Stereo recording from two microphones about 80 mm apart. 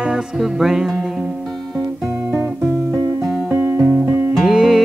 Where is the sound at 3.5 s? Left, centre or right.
Right.